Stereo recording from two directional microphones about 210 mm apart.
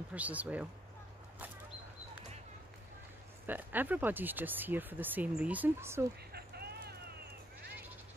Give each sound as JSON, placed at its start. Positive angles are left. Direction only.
{"t": 0.1, "sound": "speech", "side_deg": -5}
{"t": 3.4, "sound": "speech", "side_deg": -10}
{"t": 6.3, "sound": "a sound", "side_deg": -50}